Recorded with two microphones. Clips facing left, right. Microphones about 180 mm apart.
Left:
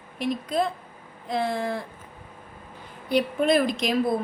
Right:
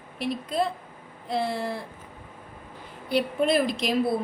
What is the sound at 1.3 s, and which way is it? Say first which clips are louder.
Speech: left 1 dB; 5° right (ahead or behind).